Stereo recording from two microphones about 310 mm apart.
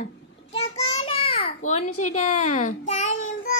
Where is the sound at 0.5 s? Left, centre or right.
Centre.